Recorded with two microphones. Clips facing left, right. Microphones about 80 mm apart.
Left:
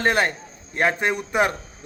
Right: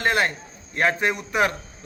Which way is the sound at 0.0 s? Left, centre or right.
Left.